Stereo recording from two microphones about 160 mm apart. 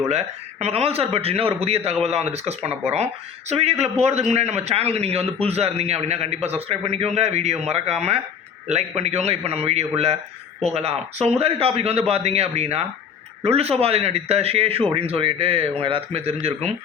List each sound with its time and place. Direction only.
0.1 s a man's voice: 40° right (ahead or behind)